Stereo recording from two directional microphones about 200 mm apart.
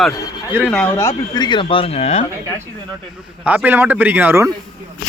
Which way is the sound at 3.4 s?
10° right (ahead or behind).